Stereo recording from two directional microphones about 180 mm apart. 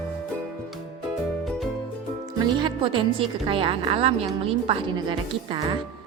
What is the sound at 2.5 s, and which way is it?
A woman's voice, 25° right (ahead or behind).